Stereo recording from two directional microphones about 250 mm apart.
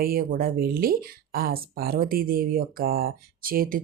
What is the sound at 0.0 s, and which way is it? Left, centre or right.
Speech, right.